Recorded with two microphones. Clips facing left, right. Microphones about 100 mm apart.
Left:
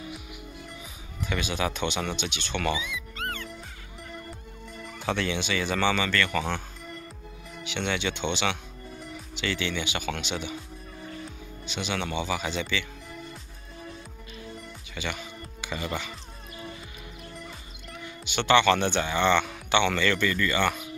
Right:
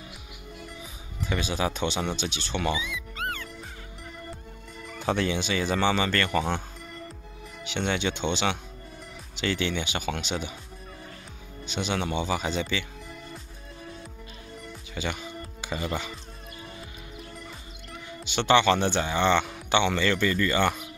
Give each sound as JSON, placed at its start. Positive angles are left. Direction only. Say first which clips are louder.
{"t": 1.3, "sound": "speech", "louder": "right 1 dB", "side_deg": -35}
{"t": 2.5, "sound": "speech", "louder": "even", "side_deg": -20}
{"t": 3.2, "sound": "music", "louder": "right 2 dB", "side_deg": -5}
{"t": 5.0, "sound": "speech", "louder": "right 2 dB", "side_deg": -35}
{"t": 7.9, "sound": "speech", "louder": "right 1 dB", "side_deg": -35}
{"t": 11.7, "sound": "speech", "louder": "right 2 dB", "side_deg": -45}
{"t": 12.0, "sound": "speech", "louder": "even", "side_deg": -30}
{"t": 15.0, "sound": "speech", "louder": "right 2 dB", "side_deg": -35}
{"t": 15.8, "sound": "speech", "louder": "right 1 dB", "side_deg": -20}
{"t": 18.2, "sound": "speech", "louder": "even", "side_deg": -35}